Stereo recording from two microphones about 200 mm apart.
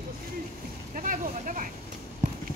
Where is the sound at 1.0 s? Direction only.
40° right (ahead or behind).